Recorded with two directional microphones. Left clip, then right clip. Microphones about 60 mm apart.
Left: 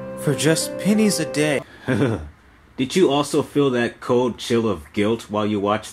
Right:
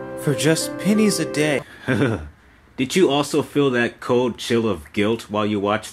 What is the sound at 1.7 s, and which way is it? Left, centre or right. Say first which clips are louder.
Speech: right 1 dB; right.